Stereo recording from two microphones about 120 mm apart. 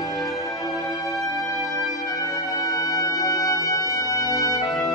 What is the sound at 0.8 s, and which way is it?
Music, 30° left (ahead or behind).